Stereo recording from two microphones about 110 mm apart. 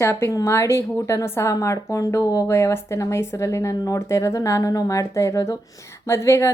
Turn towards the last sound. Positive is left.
turn(degrees=25)  # may be behind; listen again after turning